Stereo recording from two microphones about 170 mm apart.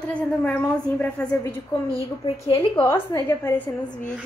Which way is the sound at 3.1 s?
15° left (ahead or behind).